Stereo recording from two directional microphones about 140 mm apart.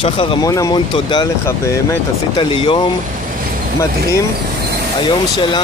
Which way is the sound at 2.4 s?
35° left (ahead or behind).